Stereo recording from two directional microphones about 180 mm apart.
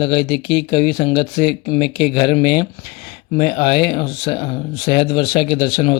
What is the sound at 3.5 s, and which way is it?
A man's voice, 30° left (ahead or behind).